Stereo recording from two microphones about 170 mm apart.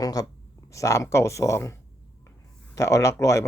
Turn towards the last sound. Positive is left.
turn(degrees=15)  # may be behind; listen again after turning